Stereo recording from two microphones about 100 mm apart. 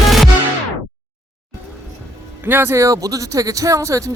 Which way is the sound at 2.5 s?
25° right (ahead or behind).